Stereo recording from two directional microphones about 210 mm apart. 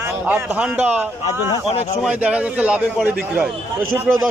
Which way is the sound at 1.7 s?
30° left (ahead or behind).